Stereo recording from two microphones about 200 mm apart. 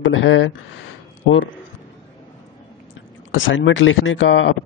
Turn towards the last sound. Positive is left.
turn(degrees=70)  # may be behind; listen again after turning